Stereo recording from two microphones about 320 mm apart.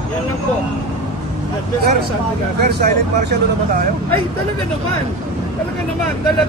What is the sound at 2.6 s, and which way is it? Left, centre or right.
Speech, right.